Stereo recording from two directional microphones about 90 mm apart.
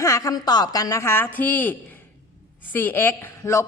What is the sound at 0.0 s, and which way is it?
A woman's voice, 35° left (ahead or behind).